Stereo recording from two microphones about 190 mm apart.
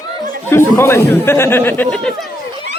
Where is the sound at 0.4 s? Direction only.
10° left (ahead or behind).